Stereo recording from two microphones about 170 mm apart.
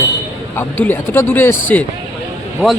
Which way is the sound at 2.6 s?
Centre (ahead or behind).